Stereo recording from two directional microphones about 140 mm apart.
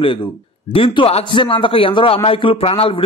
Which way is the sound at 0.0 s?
40° left (ahead or behind).